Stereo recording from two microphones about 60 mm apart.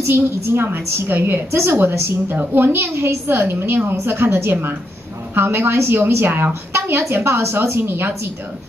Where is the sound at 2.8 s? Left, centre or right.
Right.